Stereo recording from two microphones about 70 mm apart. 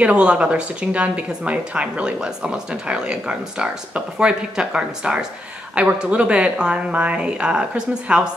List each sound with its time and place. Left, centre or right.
0.0 s speech: centre